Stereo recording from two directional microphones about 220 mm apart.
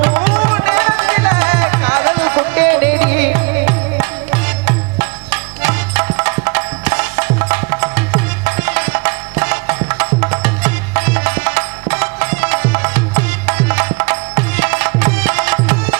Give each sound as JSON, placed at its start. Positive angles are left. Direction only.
{"t": 0.0, "sound": "music", "side_deg": -20}